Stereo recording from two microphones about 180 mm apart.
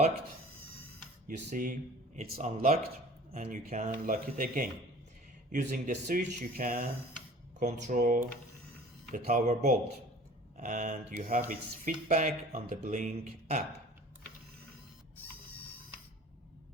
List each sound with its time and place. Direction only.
1.5 s speech: 45° right (ahead or behind)